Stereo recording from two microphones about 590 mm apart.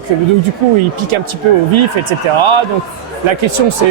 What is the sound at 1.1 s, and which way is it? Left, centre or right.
Speech, right.